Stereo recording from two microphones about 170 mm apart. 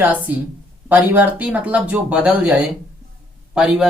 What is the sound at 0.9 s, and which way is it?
Speech, 10° right (ahead or behind).